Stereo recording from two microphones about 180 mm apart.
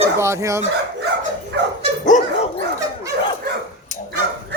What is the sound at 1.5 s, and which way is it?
Dog, 70° right (ahead or behind).